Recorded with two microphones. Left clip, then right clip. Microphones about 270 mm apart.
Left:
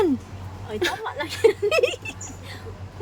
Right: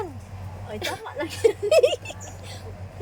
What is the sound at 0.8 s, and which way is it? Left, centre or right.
Speech, centre.